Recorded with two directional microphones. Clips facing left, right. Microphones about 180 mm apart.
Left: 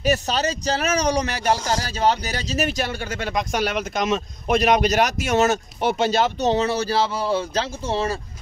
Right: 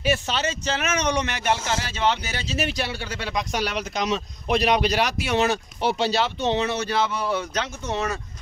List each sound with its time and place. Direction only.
0.0 s speech: 40° left (ahead or behind)